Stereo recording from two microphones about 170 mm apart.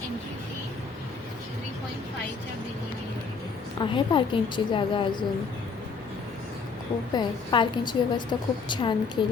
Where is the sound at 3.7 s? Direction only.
30° left (ahead or behind).